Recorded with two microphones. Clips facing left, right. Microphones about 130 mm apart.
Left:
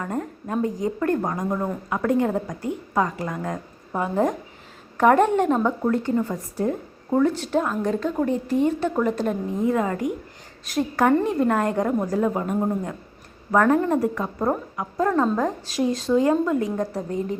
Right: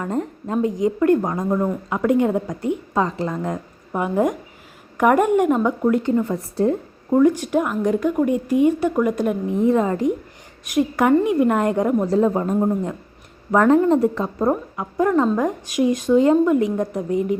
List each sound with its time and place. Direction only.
0.0 s a woman's voice: 25° right (ahead or behind)
1.5 s speech: 5° right (ahead or behind)
1.9 s a woman's voice: 20° right (ahead or behind)
6.2 s a woman's voice: 30° right (ahead or behind)
7.1 s speech: 10° right (ahead or behind)
9.6 s a woman's voice: 20° right (ahead or behind)
12.5 s a woman's voice: 15° right (ahead or behind)
14.3 s speech: 10° right (ahead or behind)